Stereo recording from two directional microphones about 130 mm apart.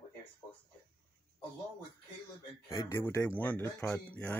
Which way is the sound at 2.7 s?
20° left (ahead or behind).